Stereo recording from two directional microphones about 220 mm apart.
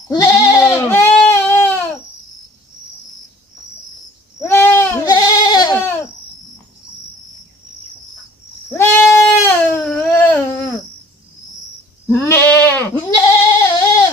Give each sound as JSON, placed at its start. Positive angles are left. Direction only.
{"t": 0.1, "sound": "goat", "side_deg": 15}
{"t": 4.4, "sound": "goat", "side_deg": 10}
{"t": 8.7, "sound": "bleat", "side_deg": 10}
{"t": 12.1, "sound": "bleat", "side_deg": 10}
{"t": 13.1, "sound": "goat", "side_deg": 15}